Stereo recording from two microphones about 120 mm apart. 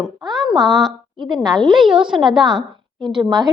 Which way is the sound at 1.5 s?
40° right (ahead or behind).